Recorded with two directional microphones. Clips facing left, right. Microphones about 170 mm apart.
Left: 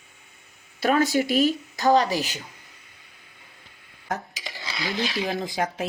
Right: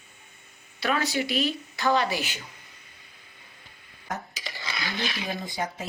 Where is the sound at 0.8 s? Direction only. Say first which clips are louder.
Left 6 dB; 45° left (ahead or behind).